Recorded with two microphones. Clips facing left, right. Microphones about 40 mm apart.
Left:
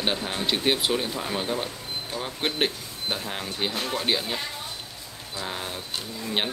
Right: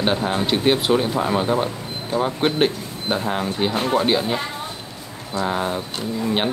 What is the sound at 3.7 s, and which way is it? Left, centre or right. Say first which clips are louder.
Speech: right 9 dB; right.